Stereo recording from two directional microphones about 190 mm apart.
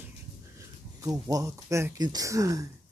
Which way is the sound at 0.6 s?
20° right (ahead or behind).